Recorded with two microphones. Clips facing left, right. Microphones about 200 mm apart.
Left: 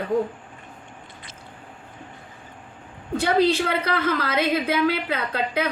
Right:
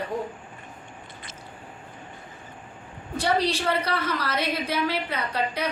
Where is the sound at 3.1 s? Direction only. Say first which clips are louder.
Left 5 dB; 55° left (ahead or behind).